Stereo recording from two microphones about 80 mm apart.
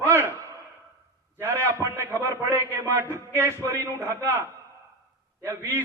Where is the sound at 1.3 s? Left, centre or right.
Right.